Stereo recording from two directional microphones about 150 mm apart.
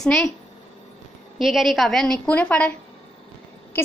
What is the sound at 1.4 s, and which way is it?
A woman's voice, centre (ahead or behind).